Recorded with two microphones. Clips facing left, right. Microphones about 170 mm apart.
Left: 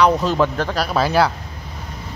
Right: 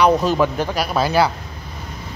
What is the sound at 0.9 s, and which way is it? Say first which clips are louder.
Speech: even; centre (ahead or behind).